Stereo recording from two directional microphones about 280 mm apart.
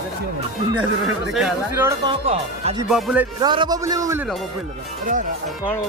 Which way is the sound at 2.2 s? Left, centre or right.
Right.